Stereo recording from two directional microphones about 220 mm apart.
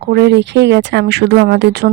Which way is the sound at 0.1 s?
50° right (ahead or behind).